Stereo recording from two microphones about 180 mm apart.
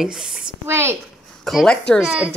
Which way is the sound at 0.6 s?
15° right (ahead or behind).